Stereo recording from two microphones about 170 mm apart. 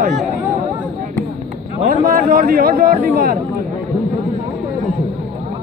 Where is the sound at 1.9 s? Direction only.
55° right (ahead or behind).